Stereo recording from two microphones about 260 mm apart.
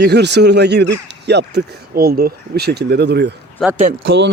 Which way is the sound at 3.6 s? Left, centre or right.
Centre.